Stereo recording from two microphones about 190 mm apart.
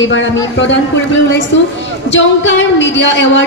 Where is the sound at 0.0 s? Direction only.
75° left (ahead or behind).